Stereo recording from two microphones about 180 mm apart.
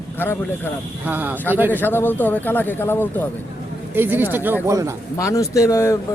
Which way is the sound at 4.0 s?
10° right (ahead or behind).